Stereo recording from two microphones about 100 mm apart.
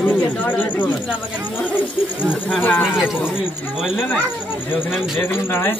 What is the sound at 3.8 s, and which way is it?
Speech, 5° right (ahead or behind).